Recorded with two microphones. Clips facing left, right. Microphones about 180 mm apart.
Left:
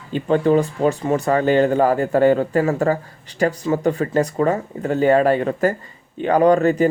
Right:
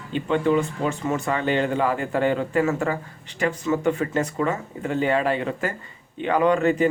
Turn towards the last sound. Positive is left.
turn(degrees=40)  # may be behind; listen again after turning